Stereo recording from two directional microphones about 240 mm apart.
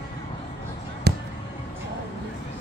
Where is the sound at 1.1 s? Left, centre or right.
Right.